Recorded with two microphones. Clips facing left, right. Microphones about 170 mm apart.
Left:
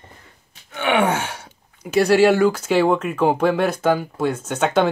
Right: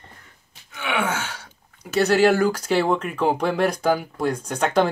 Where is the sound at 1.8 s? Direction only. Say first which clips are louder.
Left 3 dB; 10° left (ahead or behind).